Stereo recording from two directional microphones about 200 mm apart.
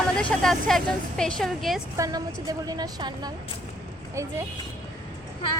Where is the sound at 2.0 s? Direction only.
20° right (ahead or behind).